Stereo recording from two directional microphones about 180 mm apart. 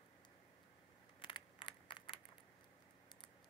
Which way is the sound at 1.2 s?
25° left (ahead or behind).